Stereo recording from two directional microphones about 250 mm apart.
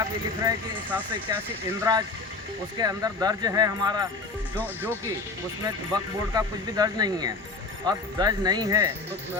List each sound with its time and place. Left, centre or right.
1.3 s speech: centre